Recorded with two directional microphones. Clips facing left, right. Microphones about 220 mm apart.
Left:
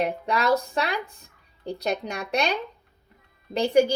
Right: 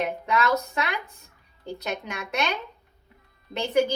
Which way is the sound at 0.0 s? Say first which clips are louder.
Left 1 dB; 35° left (ahead or behind).